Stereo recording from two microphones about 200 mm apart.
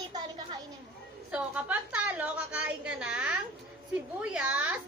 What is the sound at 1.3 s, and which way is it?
A woman's voice, 5° right (ahead or behind).